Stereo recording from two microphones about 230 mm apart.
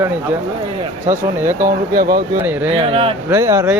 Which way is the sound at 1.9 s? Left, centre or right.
Right.